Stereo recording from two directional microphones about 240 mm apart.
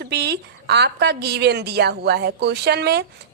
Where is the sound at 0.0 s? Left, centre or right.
Right.